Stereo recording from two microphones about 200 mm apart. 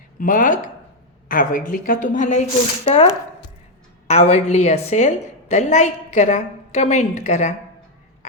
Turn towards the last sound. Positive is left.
turn(degrees=35)  # may be behind; listen again after turning